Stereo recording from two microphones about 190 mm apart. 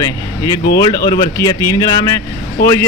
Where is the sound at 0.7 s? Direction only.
20° left (ahead or behind).